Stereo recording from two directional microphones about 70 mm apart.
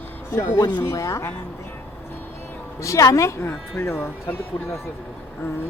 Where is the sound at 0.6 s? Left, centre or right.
Left.